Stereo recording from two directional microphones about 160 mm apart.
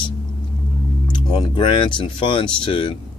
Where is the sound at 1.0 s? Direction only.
30° left (ahead or behind).